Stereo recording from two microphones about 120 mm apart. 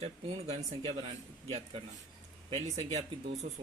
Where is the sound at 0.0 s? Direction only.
60° right (ahead or behind).